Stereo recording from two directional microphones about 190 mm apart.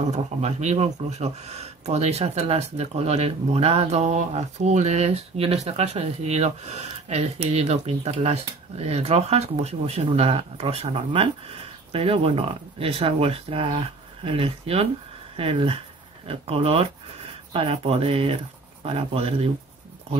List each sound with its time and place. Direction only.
0.1 s speech: 35° right (ahead or behind)